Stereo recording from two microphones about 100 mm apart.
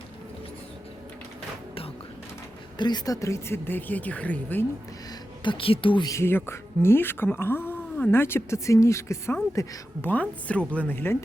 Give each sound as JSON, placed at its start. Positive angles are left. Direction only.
{"t": 2.7, "sound": "speech", "side_deg": 45}
{"t": 5.4, "sound": "speech", "side_deg": 60}
{"t": 6.1, "sound": "a woman's voice", "side_deg": 25}
{"t": 10.1, "sound": "speech", "side_deg": 15}